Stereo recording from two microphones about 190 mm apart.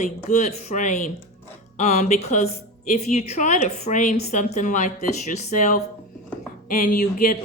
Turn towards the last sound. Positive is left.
turn(degrees=40)  # may be behind; listen again after turning